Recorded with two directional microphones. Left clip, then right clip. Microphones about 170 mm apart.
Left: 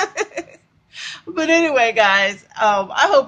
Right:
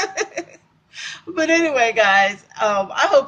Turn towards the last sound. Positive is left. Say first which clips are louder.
# left 1 dB
turn(degrees=15)  # may be behind; listen again after turning